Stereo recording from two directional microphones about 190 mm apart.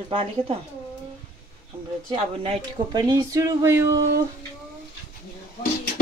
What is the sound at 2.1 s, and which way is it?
A woman's voice, 30° right (ahead or behind).